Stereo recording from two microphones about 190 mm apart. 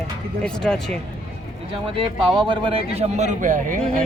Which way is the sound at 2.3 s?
25° right (ahead or behind).